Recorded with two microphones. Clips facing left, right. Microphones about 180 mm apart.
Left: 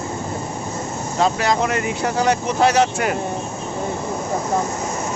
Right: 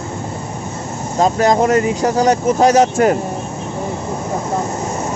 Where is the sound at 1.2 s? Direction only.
45° right (ahead or behind).